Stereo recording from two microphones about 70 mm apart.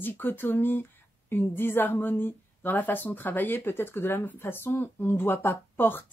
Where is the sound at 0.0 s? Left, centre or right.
Left.